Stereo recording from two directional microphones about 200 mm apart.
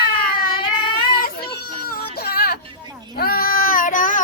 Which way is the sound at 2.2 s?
50° left (ahead or behind).